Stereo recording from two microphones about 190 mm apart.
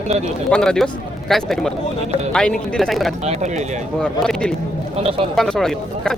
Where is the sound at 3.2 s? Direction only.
35° right (ahead or behind).